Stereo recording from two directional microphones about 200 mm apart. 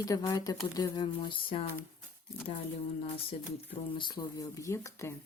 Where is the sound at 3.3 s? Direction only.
25° left (ahead or behind).